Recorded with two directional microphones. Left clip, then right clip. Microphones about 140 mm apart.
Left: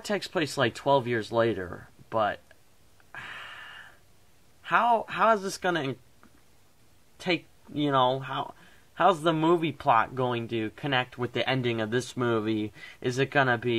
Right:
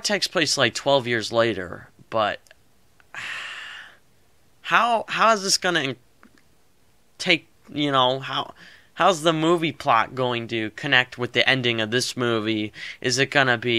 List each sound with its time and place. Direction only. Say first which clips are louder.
0.0 s speech: right 7 dB; 25° right (ahead or behind)
3.1 s a sound: right 8 dB; 30° right (ahead or behind)
4.6 s speech: right 4 dB; 25° right (ahead or behind)
7.2 s speech: right 8 dB; 25° right (ahead or behind)